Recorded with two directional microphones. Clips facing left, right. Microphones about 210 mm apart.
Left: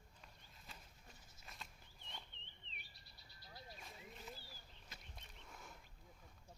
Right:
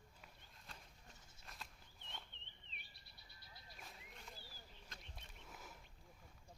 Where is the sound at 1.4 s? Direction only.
Centre (ahead or behind).